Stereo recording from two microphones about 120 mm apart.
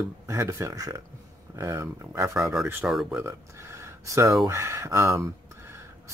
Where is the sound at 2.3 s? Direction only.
5° right (ahead or behind).